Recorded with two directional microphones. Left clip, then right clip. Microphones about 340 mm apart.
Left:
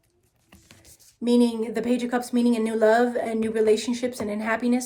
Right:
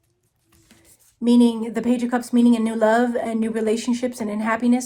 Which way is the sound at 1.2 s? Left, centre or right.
Centre.